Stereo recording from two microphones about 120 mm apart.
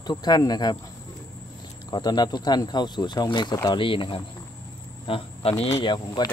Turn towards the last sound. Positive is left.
turn(degrees=40)  # may be behind; listen again after turning